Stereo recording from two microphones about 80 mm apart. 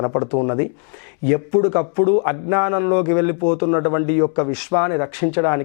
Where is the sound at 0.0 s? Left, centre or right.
Left.